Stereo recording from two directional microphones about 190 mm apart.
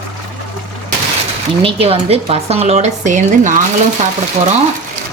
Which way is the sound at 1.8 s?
30° right (ahead or behind).